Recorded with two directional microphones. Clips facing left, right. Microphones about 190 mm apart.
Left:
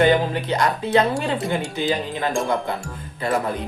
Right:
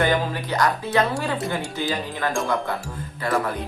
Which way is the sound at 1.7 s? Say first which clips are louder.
Left 3 dB; 20° left (ahead or behind).